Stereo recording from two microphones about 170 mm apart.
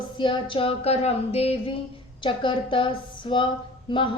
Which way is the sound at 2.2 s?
30° left (ahead or behind).